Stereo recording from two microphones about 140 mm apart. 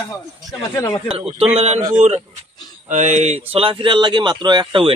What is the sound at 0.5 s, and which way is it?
Speech, 25° left (ahead or behind).